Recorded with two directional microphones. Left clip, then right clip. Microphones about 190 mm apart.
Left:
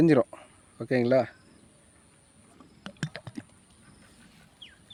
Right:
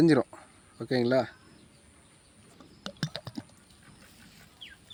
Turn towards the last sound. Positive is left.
turn(degrees=-5)  # may be behind; listen again after turning